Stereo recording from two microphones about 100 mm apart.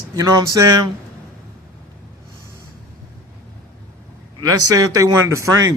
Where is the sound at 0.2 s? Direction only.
35° right (ahead or behind).